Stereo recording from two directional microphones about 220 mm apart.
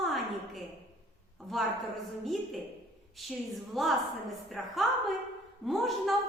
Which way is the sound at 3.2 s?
Centre (ahead or behind).